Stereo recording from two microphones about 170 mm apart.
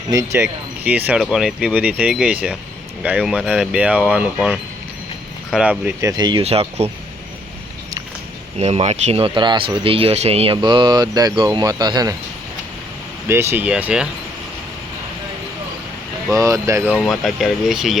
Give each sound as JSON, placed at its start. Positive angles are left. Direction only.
{"t": 0.1, "sound": "speech", "side_deg": -20}
{"t": 6.1, "sound": "speech", "side_deg": -25}
{"t": 6.4, "sound": "speech", "side_deg": -35}
{"t": 8.5, "sound": "speech", "side_deg": -40}
{"t": 13.2, "sound": "speech", "side_deg": -15}
{"t": 16.3, "sound": "speech", "side_deg": -20}
{"t": 17.0, "sound": "speech", "side_deg": 0}